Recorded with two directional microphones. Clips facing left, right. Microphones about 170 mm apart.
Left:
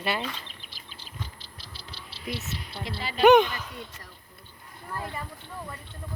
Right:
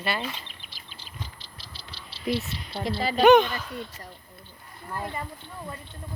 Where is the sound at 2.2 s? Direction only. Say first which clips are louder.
Right 7 dB; 30° right (ahead or behind).